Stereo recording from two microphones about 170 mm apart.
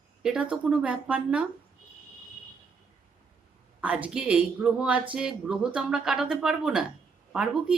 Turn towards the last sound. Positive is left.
turn(degrees=-5)  # may be behind; listen again after turning